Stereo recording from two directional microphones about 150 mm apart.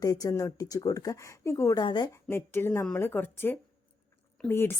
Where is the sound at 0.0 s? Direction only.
25° left (ahead or behind).